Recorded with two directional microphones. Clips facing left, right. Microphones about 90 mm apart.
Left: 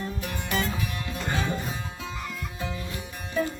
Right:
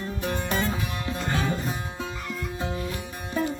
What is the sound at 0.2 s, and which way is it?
Music, 25° right (ahead or behind).